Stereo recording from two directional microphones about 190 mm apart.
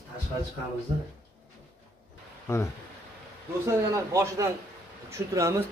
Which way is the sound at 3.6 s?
15° right (ahead or behind).